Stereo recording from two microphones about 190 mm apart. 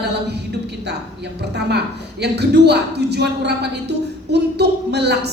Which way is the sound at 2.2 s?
60° right (ahead or behind).